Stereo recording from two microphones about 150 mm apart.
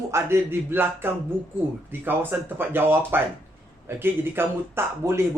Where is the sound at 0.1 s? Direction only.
15° right (ahead or behind).